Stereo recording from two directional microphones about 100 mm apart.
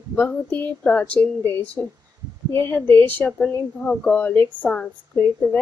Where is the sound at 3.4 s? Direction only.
10° left (ahead or behind).